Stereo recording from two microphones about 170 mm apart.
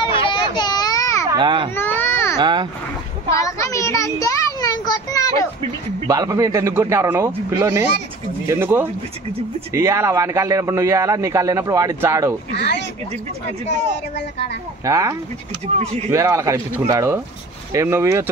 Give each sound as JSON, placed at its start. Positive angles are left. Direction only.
{"t": 0.0, "sound": "a sound", "side_deg": 30}
{"t": 1.3, "sound": "a child's voice", "side_deg": -30}
{"t": 1.8, "sound": "baby cry", "side_deg": 10}
{"t": 2.3, "sound": "speech", "side_deg": -25}
{"t": 3.7, "sound": "a child's voice", "side_deg": 20}
{"t": 6.0, "sound": "a man's voice", "side_deg": -20}
{"t": 12.4, "sound": "speech", "side_deg": 75}
{"t": 13.7, "sound": "speech", "side_deg": 90}
{"t": 14.9, "sound": "speech", "side_deg": -20}
{"t": 15.6, "sound": "speech", "side_deg": -40}
{"t": 16.1, "sound": "a man's voice", "side_deg": -15}